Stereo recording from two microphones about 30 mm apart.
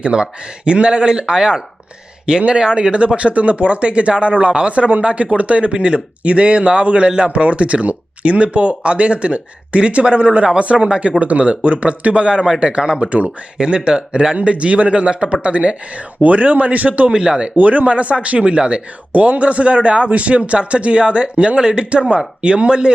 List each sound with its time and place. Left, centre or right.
0.0 s speech: right
2.9 s speech: right
4.8 s speech: right
5.1 s speech: right
13.0 s speech: right
13.6 s speech: right
14.4 s speech: right
16.2 s a man's voice: right
17.1 s speech: right
17.6 s speech: right
19.1 s speech: right